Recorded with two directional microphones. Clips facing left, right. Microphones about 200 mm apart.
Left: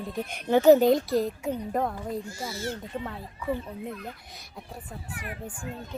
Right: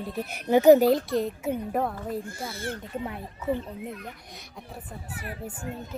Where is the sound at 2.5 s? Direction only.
55° right (ahead or behind).